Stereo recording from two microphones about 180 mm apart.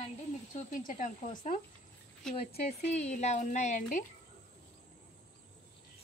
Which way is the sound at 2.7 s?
40° left (ahead or behind).